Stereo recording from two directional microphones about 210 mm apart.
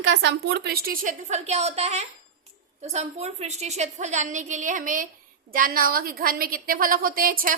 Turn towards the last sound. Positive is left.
turn(degrees=-45)  # may be behind; listen again after turning